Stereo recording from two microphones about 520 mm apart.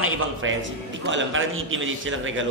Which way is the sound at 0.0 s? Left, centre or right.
Right.